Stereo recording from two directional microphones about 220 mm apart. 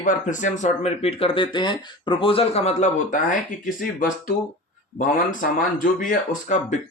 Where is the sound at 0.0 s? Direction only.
35° left (ahead or behind).